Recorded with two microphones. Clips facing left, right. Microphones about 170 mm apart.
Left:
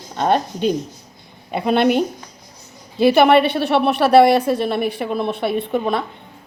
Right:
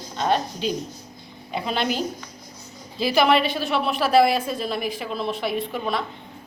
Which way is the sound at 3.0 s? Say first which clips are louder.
Left 7 dB; 60° left (ahead or behind).